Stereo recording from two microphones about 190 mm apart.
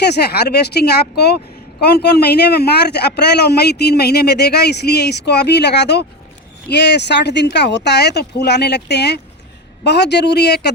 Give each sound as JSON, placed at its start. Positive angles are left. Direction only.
{"t": 0.0, "sound": "speech", "side_deg": 60}